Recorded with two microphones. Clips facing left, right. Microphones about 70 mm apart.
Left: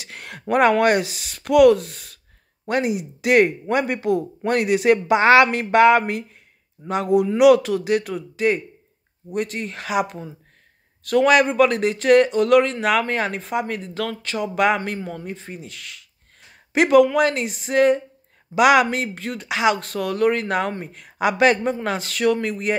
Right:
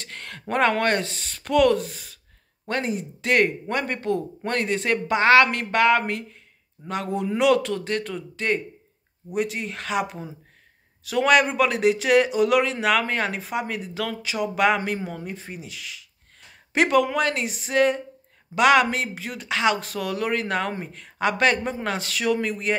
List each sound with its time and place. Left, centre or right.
0.0 s speech: centre
2.6 s speech: centre